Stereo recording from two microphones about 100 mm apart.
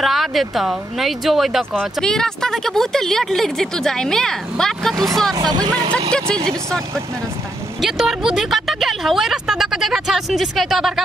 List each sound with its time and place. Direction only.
0.0 s speech: centre (ahead or behind)
5.3 s speech: 45° right (ahead or behind)
6.1 s speech: 10° left (ahead or behind)
7.8 s speech: centre (ahead or behind)